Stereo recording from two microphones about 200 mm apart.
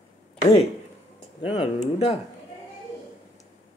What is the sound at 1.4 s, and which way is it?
Speech, 30° left (ahead or behind).